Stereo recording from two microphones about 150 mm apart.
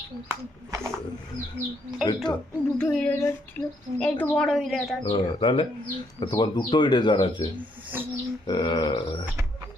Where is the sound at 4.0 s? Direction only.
10° left (ahead or behind).